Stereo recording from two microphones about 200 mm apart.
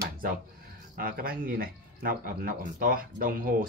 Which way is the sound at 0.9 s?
45° right (ahead or behind).